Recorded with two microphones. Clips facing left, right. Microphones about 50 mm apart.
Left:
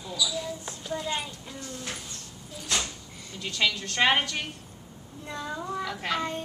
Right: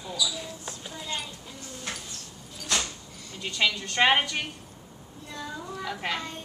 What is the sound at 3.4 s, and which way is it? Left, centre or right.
A woman's voice, centre.